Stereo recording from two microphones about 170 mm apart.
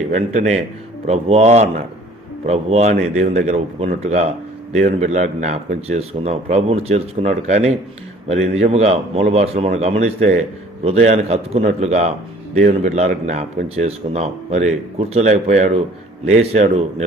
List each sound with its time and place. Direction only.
1.0 s speech: 40° right (ahead or behind)